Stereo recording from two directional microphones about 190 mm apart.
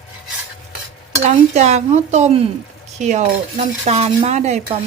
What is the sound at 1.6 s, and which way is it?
Speech, 35° right (ahead or behind).